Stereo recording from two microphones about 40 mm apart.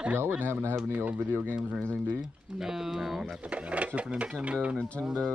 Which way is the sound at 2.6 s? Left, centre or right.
Centre.